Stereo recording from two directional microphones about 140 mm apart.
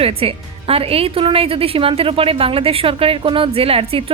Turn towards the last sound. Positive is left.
turn(degrees=-45)  # may be behind; listen again after turning